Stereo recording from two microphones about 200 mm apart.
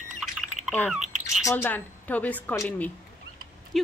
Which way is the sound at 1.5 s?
10° left (ahead or behind).